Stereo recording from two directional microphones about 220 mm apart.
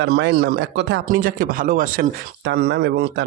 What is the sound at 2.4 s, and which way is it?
Speech, 50° right (ahead or behind).